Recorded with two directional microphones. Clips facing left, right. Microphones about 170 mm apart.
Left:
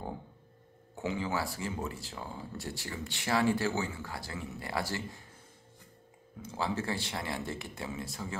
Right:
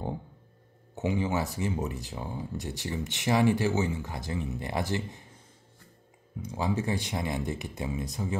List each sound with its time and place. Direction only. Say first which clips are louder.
0.9 s speech: right 5 dB; 20° right (ahead or behind)
6.4 s speech: right 4 dB; 15° right (ahead or behind)